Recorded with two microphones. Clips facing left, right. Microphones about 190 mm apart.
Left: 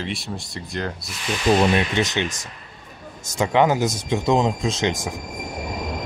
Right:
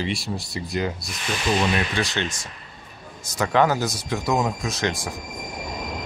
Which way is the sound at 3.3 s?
20° left (ahead or behind).